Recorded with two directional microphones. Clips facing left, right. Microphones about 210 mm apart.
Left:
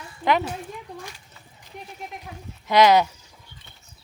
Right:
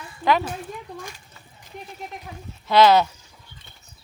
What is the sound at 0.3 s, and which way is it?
Speech, 20° left (ahead or behind).